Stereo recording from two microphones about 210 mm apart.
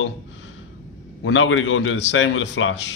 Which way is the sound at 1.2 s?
65° left (ahead or behind).